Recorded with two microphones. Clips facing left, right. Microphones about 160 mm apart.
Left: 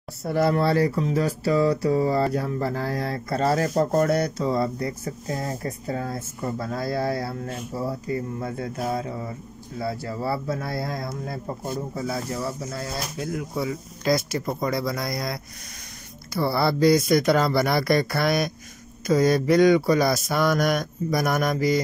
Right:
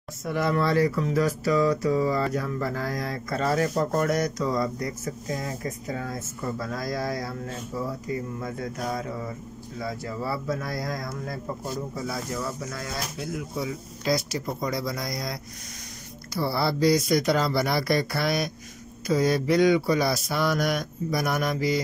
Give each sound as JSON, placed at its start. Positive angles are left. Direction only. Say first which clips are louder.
{"t": 0.2, "sound": "speech", "louder": "left 3 dB", "side_deg": 35}
{"t": 13.2, "sound": "speech", "louder": "left 4 dB", "side_deg": 55}
{"t": 16.3, "sound": "speech", "louder": "left 3 dB", "side_deg": 60}
{"t": 19.0, "sound": "mantra", "louder": "left 3 dB", "side_deg": 45}